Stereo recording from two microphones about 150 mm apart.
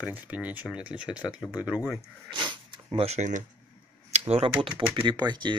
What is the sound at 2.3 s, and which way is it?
Dog, 30° right (ahead or behind).